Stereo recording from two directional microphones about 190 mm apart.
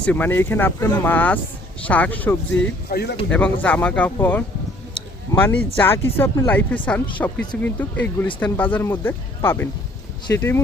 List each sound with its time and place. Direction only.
0.0 s speech: 10° left (ahead or behind)
2.9 s speech: 60° left (ahead or behind)
3.2 s speech: 5° left (ahead or behind)